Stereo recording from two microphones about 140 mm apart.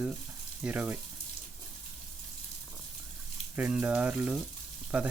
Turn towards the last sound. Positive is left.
turn(degrees=-10)  # may be behind; listen again after turning